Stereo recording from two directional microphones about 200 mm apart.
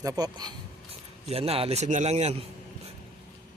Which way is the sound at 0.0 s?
20° right (ahead or behind).